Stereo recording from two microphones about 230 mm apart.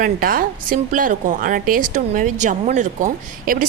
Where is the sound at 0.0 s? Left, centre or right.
Right.